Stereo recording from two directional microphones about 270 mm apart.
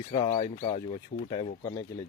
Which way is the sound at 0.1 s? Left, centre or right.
Left.